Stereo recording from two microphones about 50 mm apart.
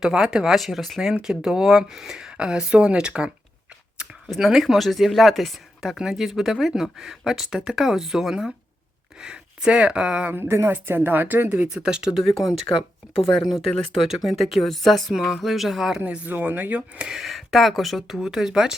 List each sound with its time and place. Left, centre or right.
0.0 s speech: centre
0.5 s speech: centre
0.9 s speech: centre
4.4 s speech: centre; by 10.3 s right
10.3 s speech: right
11.7 s speech: centre
12.2 s speech: centre
13.7 s speech: centre
14.1 s speech: centre
15.1 s speech: centre
15.4 s speech: centre
16.0 s speech: right
17.1 s speech: centre
18.2 s speech: centre